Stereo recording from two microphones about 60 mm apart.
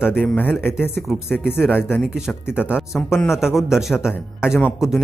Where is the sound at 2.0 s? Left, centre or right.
Centre.